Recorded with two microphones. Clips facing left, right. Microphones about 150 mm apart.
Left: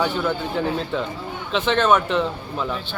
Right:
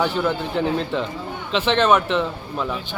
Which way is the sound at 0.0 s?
Centre (ahead or behind).